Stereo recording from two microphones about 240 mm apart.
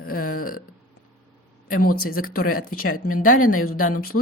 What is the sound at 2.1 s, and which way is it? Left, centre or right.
Speech, left.